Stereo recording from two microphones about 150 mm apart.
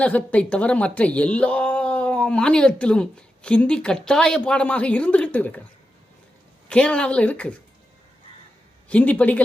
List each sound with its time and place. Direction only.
0.0 s speech: 10° left (ahead or behind)
6.7 s speech: 5° left (ahead or behind)
8.9 s speech: 10° left (ahead or behind)